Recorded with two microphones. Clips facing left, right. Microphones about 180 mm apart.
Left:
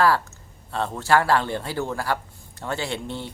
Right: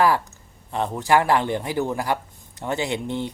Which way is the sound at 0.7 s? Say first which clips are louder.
Right 1 dB; 15° right (ahead or behind).